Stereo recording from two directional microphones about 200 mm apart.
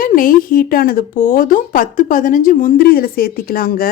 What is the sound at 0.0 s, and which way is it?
Speech, 45° left (ahead or behind).